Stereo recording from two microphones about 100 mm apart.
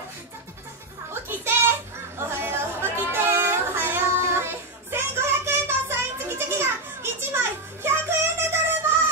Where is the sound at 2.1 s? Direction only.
25° right (ahead or behind).